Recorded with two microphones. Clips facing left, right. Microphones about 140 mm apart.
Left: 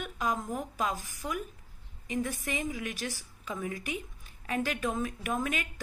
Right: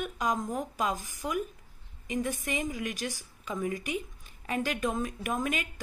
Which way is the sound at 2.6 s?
Centre (ahead or behind).